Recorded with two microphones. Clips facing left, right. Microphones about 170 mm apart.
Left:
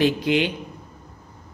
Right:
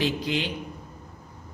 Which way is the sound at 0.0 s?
60° left (ahead or behind).